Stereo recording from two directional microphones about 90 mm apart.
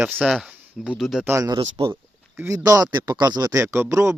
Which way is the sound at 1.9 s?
25° right (ahead or behind).